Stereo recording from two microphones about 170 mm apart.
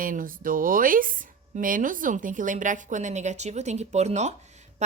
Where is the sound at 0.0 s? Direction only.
55° right (ahead or behind).